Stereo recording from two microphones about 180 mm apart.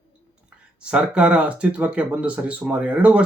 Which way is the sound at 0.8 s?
5° right (ahead or behind).